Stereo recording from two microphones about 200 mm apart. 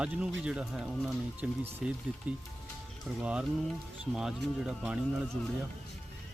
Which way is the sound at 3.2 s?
5° right (ahead or behind).